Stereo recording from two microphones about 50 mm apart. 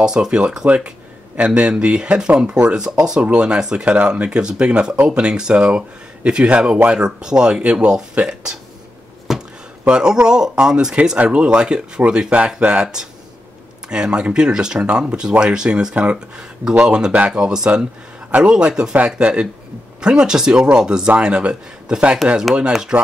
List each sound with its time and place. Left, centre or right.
0.0 s speech: centre
9.3 s chop: centre
9.8 s speech: centre